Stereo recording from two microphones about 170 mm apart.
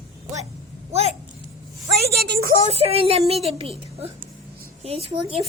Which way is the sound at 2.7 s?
35° right (ahead or behind).